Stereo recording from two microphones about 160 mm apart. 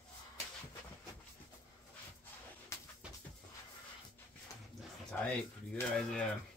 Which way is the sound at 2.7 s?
20° left (ahead or behind).